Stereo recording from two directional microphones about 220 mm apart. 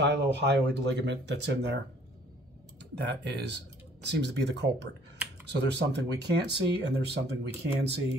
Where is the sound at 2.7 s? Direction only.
50° right (ahead or behind).